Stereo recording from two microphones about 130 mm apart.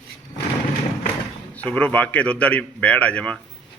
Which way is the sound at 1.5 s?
10° left (ahead or behind).